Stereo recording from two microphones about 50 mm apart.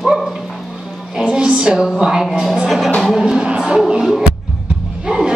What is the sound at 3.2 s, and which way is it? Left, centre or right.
Music, centre.